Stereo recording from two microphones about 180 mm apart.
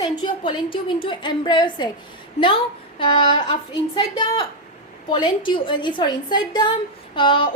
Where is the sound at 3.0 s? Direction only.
30° left (ahead or behind).